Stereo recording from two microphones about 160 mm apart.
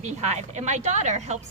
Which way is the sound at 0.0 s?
45° right (ahead or behind).